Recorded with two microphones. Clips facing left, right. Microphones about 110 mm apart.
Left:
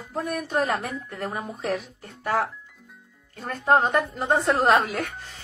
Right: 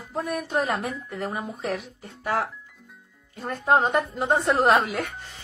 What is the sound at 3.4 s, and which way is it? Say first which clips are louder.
Speech: left 1 dB; centre (ahead or behind).